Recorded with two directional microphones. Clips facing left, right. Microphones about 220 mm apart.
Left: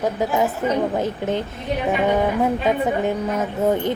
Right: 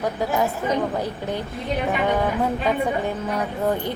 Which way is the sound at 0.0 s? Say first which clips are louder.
Left 2 dB; 20° left (ahead or behind).